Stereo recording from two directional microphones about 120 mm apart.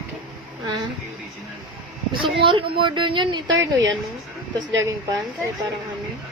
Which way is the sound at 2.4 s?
45° right (ahead or behind).